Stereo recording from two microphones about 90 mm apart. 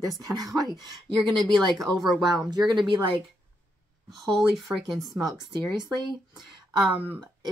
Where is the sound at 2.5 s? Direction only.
50° right (ahead or behind); by 3.2 s 65° right (ahead or behind).